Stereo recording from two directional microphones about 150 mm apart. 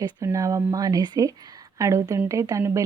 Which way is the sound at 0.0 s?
20° right (ahead or behind).